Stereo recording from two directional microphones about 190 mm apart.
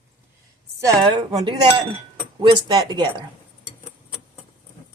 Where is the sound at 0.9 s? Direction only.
25° right (ahead or behind).